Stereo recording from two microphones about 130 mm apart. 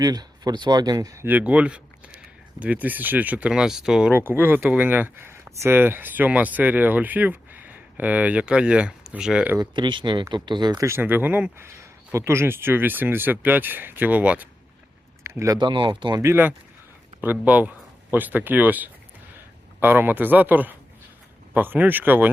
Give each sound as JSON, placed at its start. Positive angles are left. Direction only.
{"t": 0.0, "sound": "speech", "side_deg": -30}
{"t": 4.1, "sound": "speech", "side_deg": -15}
{"t": 9.6, "sound": "speech", "side_deg": -35}
{"t": 10.8, "sound": "speech", "side_deg": -15}
{"t": 15.2, "sound": "a sound", "side_deg": -25}
{"t": 15.5, "sound": "speech", "side_deg": -35}
{"t": 16.2, "sound": "speech", "side_deg": -15}